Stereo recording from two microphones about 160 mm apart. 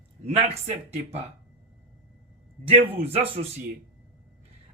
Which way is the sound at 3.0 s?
40° right (ahead or behind).